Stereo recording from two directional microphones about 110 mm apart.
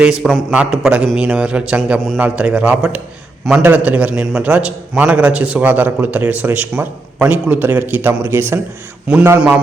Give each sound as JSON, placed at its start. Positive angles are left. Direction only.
{"t": 0.0, "sound": "a man's voice", "side_deg": -5}
{"t": 9.1, "sound": "a man's voice", "side_deg": -10}